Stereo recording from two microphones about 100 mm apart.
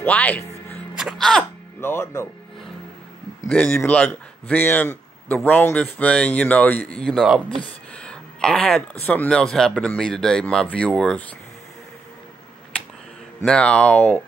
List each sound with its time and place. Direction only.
0.0 s speech: 15° left (ahead or behind)
0.9 s sneeze: centre (ahead or behind)
1.8 s speech: 25° left (ahead or behind)
3.4 s speech: 15° left (ahead or behind)
8.0 s a sound: 10° left (ahead or behind)
9.0 s speech: 15° left (ahead or behind)
9.3 s speech: 5° left (ahead or behind)
13.5 s speech: 10° left (ahead or behind)